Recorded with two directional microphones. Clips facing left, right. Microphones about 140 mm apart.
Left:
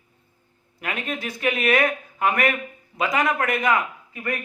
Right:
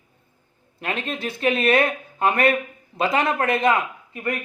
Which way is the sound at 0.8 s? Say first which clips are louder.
Right 2 dB; 30° right (ahead or behind).